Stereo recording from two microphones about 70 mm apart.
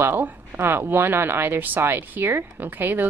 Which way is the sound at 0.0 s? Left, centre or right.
Right.